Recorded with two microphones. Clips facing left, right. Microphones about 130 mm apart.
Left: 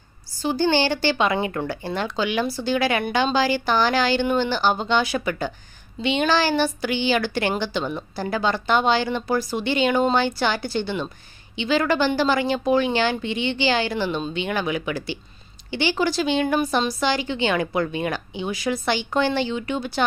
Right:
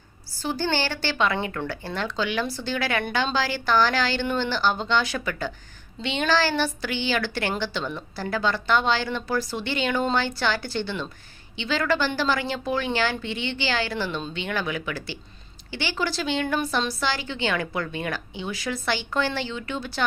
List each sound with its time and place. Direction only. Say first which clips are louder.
0.4 s speech: left 6 dB; 15° left (ahead or behind)